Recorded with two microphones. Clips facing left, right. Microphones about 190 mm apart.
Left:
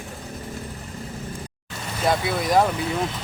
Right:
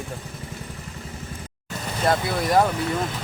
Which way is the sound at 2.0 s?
Centre (ahead or behind).